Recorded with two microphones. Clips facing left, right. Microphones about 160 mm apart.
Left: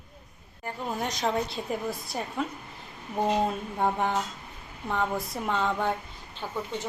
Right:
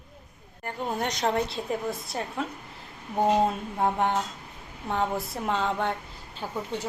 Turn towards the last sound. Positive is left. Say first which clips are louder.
# right 1 dB
turn(degrees=-10)  # may be behind; listen again after turning